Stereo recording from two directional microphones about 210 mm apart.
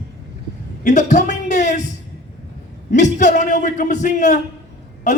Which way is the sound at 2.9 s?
35° left (ahead or behind).